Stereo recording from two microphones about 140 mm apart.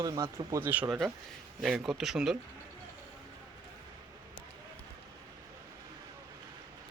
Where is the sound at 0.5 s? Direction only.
15° right (ahead or behind).